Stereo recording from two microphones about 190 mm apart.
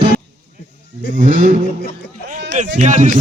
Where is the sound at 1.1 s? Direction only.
45° right (ahead or behind).